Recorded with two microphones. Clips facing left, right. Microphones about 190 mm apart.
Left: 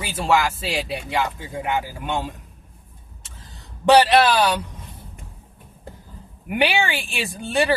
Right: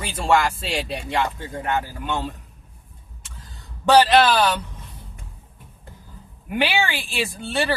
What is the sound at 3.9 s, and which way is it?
Speech, 15° left (ahead or behind).